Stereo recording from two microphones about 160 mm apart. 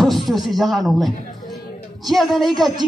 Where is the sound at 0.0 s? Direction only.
Centre (ahead or behind).